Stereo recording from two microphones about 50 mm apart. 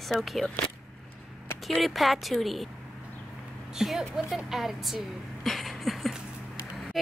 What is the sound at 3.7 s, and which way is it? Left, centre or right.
Speech, centre.